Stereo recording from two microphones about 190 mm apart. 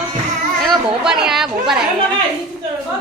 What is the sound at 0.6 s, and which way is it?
Speech, centre (ahead or behind).